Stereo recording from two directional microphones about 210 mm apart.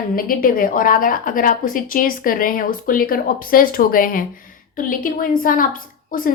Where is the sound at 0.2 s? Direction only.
45° left (ahead or behind).